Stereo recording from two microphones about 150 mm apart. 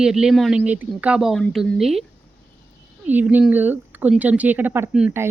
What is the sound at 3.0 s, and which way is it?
Speech, 10° right (ahead or behind).